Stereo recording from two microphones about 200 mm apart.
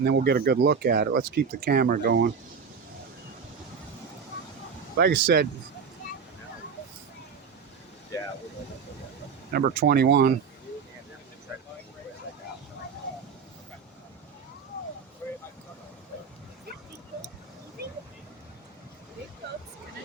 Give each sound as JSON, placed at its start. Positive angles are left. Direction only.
{"t": 0.0, "sound": "speech", "side_deg": -50}
{"t": 4.9, "sound": "speech", "side_deg": -50}
{"t": 9.5, "sound": "speech", "side_deg": -50}